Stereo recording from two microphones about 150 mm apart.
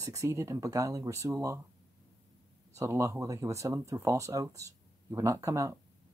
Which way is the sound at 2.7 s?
20° right (ahead or behind).